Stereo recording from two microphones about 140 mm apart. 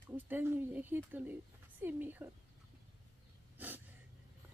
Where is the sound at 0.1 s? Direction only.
15° right (ahead or behind).